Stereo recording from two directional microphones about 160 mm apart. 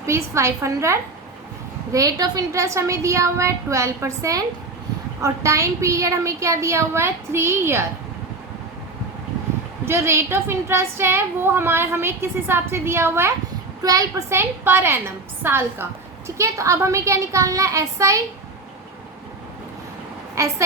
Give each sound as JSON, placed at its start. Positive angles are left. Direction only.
{"t": 0.0, "sound": "a woman's voice", "side_deg": -20}
{"t": 9.8, "sound": "a woman's voice", "side_deg": -15}
{"t": 20.3, "sound": "a woman's voice", "side_deg": -20}